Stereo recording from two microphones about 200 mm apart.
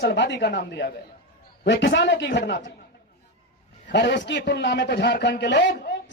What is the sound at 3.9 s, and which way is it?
A man's voice, 60° left (ahead or behind).